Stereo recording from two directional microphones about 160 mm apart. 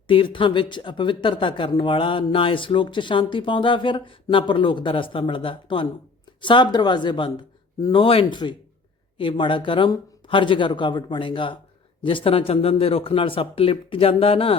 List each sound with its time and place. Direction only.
0.1 s speech: 30° left (ahead or behind)